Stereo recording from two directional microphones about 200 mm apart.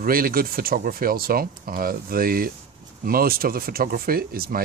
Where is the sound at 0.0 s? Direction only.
45° right (ahead or behind).